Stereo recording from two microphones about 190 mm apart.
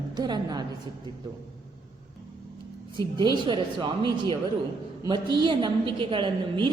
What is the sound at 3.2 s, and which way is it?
A woman's voice, 25° right (ahead or behind).